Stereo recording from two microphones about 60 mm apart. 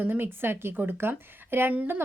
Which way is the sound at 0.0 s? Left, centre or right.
Right.